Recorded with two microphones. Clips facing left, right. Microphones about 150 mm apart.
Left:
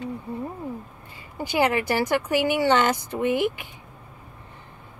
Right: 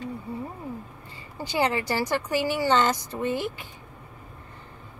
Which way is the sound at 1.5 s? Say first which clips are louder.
Left 3 dB; 15° left (ahead or behind).